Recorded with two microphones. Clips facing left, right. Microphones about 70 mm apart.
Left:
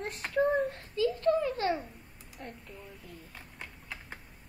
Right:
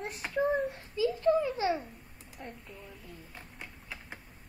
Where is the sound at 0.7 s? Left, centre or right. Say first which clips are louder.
Left 1 dB; centre.